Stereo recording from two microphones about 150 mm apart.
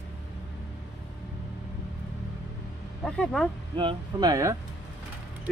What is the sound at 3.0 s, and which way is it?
Speech, 5° left (ahead or behind).